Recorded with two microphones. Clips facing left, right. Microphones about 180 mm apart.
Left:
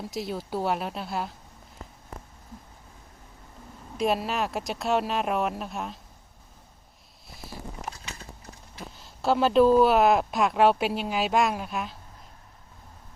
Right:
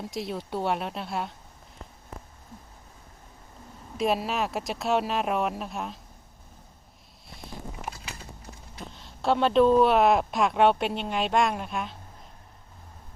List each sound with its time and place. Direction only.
0.0 s speech: centre (ahead or behind)
3.9 s speech: centre (ahead or behind)
7.3 s vehicle: centre (ahead or behind)
8.9 s speech: centre (ahead or behind)